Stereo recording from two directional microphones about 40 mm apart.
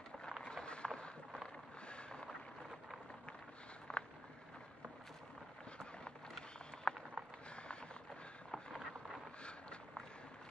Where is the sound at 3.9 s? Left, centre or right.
Left.